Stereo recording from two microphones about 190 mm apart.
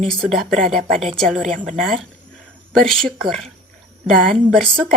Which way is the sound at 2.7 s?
Centre (ahead or behind).